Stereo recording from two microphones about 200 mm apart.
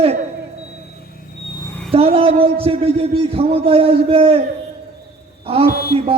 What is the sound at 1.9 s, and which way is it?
A man's voice, 30° right (ahead or behind).